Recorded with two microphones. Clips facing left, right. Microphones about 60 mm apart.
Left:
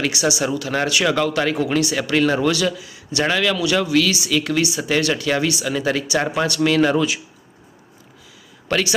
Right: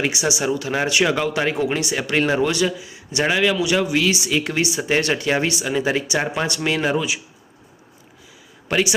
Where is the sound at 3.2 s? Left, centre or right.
Centre.